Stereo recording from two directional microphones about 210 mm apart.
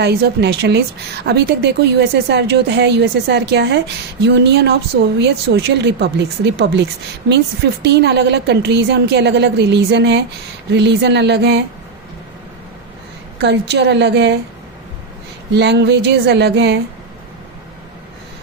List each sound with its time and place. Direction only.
0.0 s a woman's voice: 50° right (ahead or behind)
13.4 s a woman's voice: 55° right (ahead or behind)
15.5 s a woman's voice: 55° right (ahead or behind)